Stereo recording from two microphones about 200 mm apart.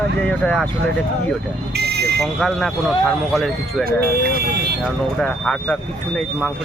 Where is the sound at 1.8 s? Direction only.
55° right (ahead or behind).